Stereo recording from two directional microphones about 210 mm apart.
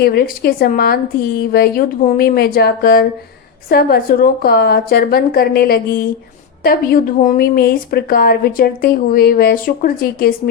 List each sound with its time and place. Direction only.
0.0 s speech: 45° left (ahead or behind)